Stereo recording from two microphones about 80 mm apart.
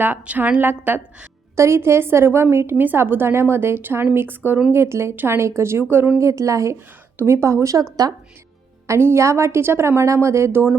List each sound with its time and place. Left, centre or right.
0.0 s a woman's voice: centre; by 7.9 s right
8.9 s a woman's voice: right